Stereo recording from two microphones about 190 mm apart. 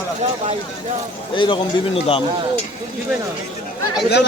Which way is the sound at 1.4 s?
25° left (ahead or behind).